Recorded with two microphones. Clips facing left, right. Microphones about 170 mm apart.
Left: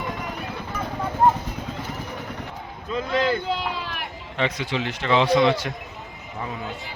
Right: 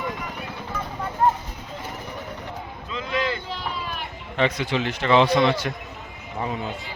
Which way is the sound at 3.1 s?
35° left (ahead or behind).